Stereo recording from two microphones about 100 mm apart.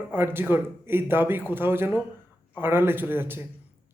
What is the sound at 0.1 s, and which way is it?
Speech, 20° right (ahead or behind).